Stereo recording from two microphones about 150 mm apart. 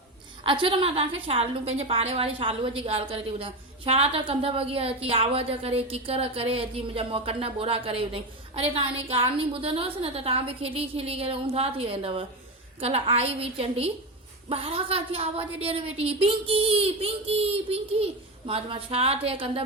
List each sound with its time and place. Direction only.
0.4 s a woman's voice: 35° right (ahead or behind)